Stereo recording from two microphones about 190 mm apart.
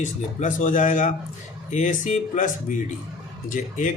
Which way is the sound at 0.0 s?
40° left (ahead or behind).